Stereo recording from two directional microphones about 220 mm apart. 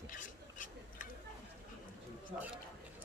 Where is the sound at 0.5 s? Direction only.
35° left (ahead or behind).